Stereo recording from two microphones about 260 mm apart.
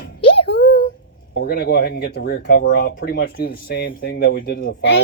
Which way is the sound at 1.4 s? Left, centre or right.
Left.